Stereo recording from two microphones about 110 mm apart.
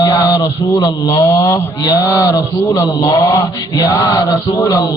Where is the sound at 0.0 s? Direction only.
35° left (ahead or behind).